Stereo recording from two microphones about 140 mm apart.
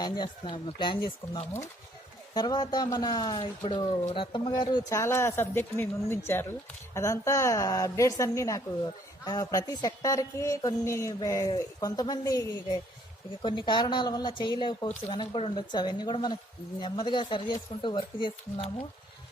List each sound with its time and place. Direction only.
0.0 s a woman's voice: 30° left (ahead or behind)